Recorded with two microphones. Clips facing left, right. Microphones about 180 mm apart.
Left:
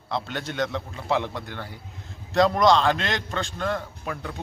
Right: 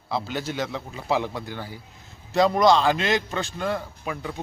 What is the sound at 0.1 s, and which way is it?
Speech, 5° right (ahead or behind).